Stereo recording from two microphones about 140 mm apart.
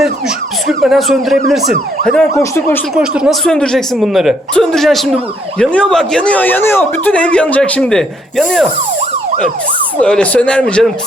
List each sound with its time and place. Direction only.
0.7 s speech: centre (ahead or behind)
2.3 s speech: 20° left (ahead or behind)
2.9 s speech: 5° right (ahead or behind)
10.0 s speech: 10° left (ahead or behind)